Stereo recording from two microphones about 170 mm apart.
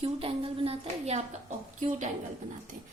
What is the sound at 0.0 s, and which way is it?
Speech, 35° right (ahead or behind).